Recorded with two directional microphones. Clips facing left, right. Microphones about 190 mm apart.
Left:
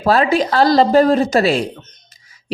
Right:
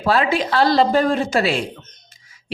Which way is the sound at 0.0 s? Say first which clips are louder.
Left 4 dB; 40° left (ahead or behind).